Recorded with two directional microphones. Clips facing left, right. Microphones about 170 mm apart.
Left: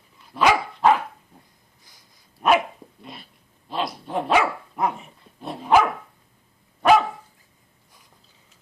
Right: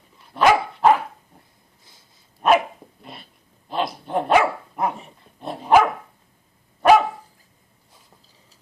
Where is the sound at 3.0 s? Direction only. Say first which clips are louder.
Left 1 dB; centre (ahead or behind).